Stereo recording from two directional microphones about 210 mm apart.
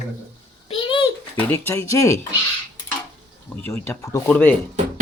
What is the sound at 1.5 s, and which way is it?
Speech, 10° left (ahead or behind).